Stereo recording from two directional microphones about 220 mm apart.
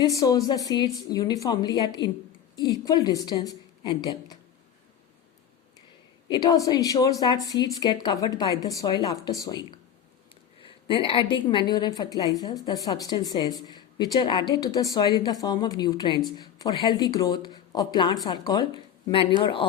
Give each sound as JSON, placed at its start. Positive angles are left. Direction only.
{"t": 0.0, "sound": "speech", "side_deg": 15}
{"t": 6.2, "sound": "a woman's voice", "side_deg": 20}
{"t": 10.8, "sound": "a woman's voice", "side_deg": 25}